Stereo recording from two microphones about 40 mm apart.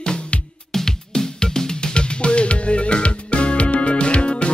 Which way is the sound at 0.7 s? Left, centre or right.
Centre.